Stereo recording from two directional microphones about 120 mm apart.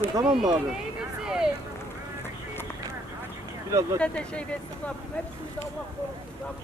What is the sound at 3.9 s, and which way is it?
Speech, 10° left (ahead or behind).